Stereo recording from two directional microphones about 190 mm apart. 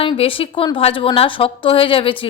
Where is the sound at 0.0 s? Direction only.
30° left (ahead or behind).